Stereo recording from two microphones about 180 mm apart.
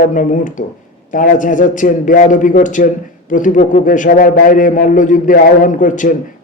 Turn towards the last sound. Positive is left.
turn(degrees=45)  # may be behind; listen again after turning